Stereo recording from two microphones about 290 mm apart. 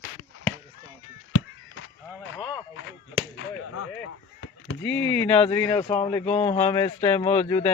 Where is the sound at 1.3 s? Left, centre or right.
Left.